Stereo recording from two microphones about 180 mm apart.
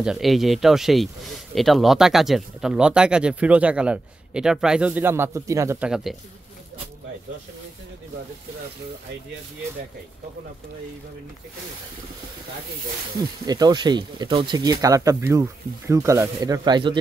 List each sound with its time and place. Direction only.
0.0 s speech: centre (ahead or behind)
5.9 s speech: centre (ahead or behind)
13.5 s speech: 20° right (ahead or behind)